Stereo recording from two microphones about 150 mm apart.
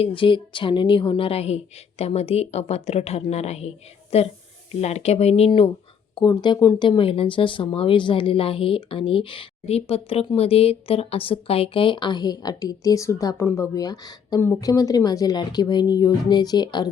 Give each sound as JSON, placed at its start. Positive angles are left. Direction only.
{"t": 0.0, "sound": "a woman's voice", "side_deg": 35}
{"t": 6.1, "sound": "speech", "side_deg": 25}